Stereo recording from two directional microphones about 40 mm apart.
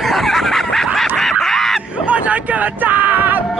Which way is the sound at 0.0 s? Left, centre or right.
Centre.